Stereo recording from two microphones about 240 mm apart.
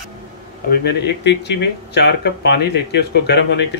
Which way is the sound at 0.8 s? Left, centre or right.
Left.